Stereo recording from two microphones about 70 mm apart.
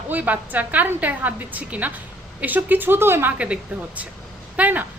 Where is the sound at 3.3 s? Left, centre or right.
Centre.